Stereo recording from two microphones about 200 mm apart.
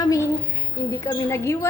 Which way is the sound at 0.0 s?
15° left (ahead or behind).